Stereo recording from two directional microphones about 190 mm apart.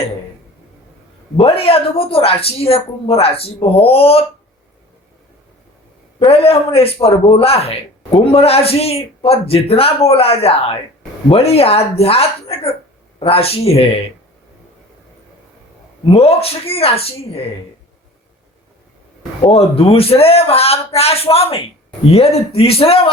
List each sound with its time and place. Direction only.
1.4 s a man's voice: 30° left (ahead or behind)
6.1 s a man's voice: 30° left (ahead or behind)
16.0 s a man's voice: 30° left (ahead or behind)
19.4 s a man's voice: 30° left (ahead or behind)